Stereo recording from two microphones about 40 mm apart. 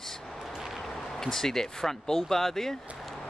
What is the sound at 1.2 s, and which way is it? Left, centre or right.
Speech, centre.